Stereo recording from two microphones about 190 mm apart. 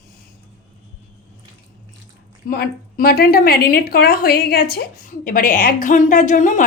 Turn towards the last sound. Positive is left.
turn(degrees=40)  # may be behind; listen again after turning